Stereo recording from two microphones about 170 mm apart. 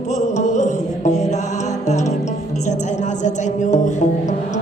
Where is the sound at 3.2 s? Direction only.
45° left (ahead or behind).